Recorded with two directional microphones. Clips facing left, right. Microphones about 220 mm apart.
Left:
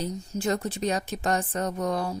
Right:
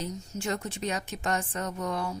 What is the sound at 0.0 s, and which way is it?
A woman's voice, 35° left (ahead or behind).